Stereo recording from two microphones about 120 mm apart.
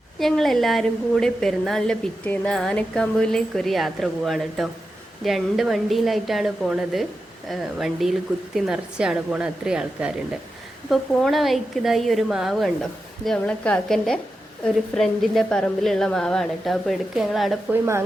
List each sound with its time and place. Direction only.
0.2 s a woman's voice: centre (ahead or behind)
17.7 s a woman's voice: 20° right (ahead or behind)